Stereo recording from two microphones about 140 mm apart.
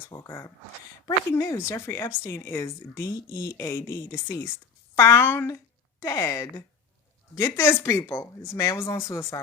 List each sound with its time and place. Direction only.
0.1 s speech: 20° left (ahead or behind)